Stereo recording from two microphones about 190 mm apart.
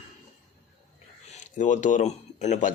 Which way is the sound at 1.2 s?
40° left (ahead or behind).